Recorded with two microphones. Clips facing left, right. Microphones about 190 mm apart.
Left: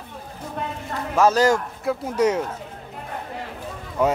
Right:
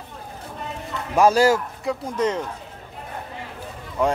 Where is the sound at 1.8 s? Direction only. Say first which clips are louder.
Left 3 dB; 10° left (ahead or behind).